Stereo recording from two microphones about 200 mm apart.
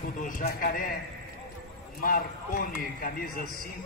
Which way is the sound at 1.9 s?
45° left (ahead or behind).